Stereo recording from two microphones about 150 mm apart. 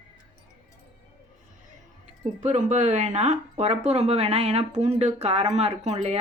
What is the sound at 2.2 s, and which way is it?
Speech, 50° right (ahead or behind).